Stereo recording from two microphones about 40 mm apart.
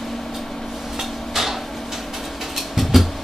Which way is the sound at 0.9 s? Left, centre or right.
Centre.